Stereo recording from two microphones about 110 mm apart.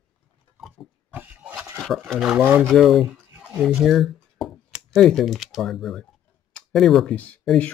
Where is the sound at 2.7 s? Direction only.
Centre (ahead or behind).